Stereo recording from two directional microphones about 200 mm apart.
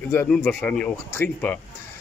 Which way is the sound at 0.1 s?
10° left (ahead or behind).